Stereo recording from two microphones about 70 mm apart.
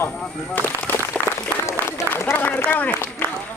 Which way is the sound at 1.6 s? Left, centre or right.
Left.